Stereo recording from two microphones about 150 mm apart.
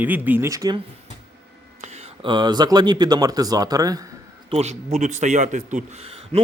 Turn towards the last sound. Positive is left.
turn(degrees=-40)  # may be behind; listen again after turning